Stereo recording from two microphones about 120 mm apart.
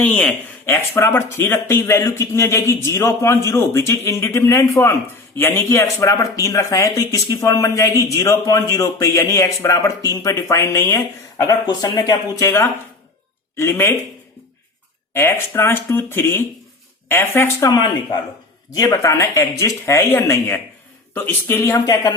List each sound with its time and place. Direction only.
0.0 s speech: 15° left (ahead or behind)
11.6 s speech: 35° left (ahead or behind)
12.5 s speech: 20° left (ahead or behind)
15.1 s speech: 20° left (ahead or behind); by 18.9 s 35° left (ahead or behind)
19.0 s speech: 25° left (ahead or behind)
21.7 s speech: 30° left (ahead or behind)